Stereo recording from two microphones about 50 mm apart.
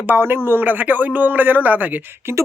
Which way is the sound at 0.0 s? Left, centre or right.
Right.